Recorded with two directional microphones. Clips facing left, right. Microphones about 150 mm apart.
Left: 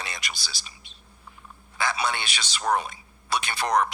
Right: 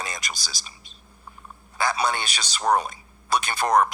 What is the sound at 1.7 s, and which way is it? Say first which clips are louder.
A man's voice: right 3 dB; 40° right (ahead or behind).